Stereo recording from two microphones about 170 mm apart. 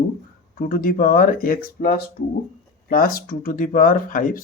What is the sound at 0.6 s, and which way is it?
Speech, 55° left (ahead or behind).